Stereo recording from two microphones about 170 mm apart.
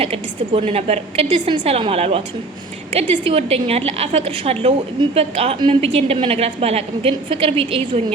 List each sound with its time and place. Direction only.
0.0 s a woman's voice: 35° right (ahead or behind)